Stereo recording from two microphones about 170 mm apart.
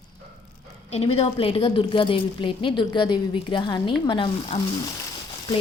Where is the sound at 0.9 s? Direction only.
35° left (ahead or behind).